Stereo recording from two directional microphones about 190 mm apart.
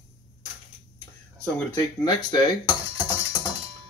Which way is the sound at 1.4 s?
10° left (ahead or behind).